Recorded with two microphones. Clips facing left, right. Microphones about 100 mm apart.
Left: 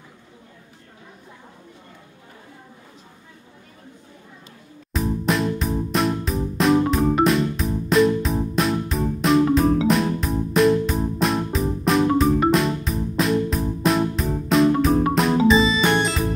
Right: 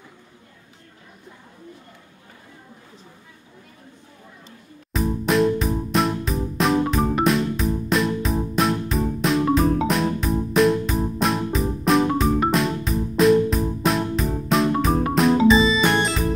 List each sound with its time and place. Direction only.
4.9 s music: centre (ahead or behind)